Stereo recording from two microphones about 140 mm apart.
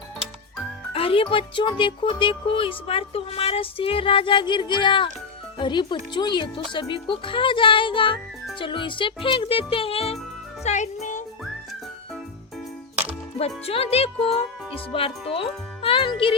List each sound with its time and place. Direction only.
0.9 s speech: 40° left (ahead or behind)
10.6 s a child's voice: 55° left (ahead or behind)
13.4 s speech: 45° left (ahead or behind)